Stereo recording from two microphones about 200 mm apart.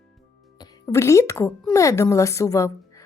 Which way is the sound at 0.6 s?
20° left (ahead or behind).